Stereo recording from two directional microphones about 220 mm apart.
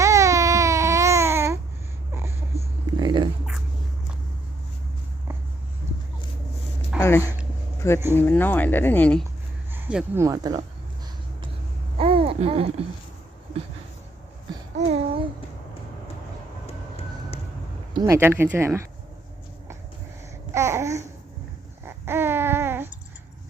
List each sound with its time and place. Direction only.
0.0 s baby cry: 15° right (ahead or behind)
2.6 s a sound: 20° right (ahead or behind)
7.0 s a sound: 10° left (ahead or behind)
7.8 s speech: 10° left (ahead or behind)
9.7 s speech: 10° right (ahead or behind)
11.9 s babbling: 25° right (ahead or behind)
14.8 s babbling: 25° right (ahead or behind)
16.6 s vehicle: 25° left (ahead or behind)
17.9 s speech: 15° right (ahead or behind)
20.5 s babbling: 10° right (ahead or behind)